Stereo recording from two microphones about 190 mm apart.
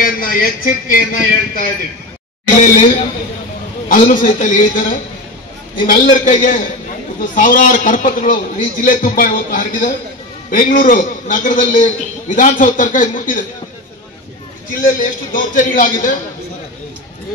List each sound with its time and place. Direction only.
0.0 s a man's voice: 50° left (ahead or behind)
3.9 s a man's voice: 45° left (ahead or behind)
14.7 s a man's voice: 45° left (ahead or behind)